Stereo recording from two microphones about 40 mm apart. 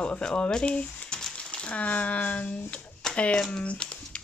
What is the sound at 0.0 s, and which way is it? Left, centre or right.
Speech, left.